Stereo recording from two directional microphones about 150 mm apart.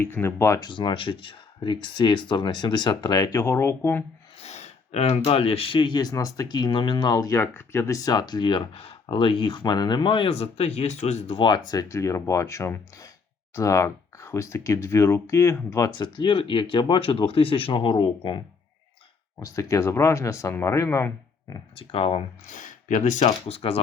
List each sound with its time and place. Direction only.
0.0 s speech: 15° left (ahead or behind)
0.7 s speech: 30° left (ahead or behind); by 4.0 s 15° left (ahead or behind)
4.4 s speech: 45° left (ahead or behind)
19.4 s speech: 20° left (ahead or behind)
21.8 s speech: 40° left (ahead or behind)
22.4 s speech: 60° left (ahead or behind)
23.6 s speech: 40° left (ahead or behind)